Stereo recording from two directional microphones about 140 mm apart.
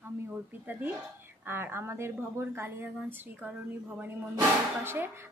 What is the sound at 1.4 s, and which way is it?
A woman's voice, 15° right (ahead or behind).